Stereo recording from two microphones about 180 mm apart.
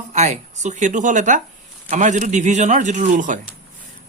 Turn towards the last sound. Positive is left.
turn(degrees=-45)  # may be behind; listen again after turning